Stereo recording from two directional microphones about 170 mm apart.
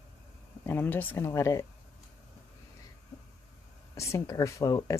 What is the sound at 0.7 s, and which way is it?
Speech, 10° left (ahead or behind).